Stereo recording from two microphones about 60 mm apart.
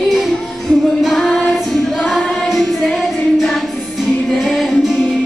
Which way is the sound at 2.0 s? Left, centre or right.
Centre.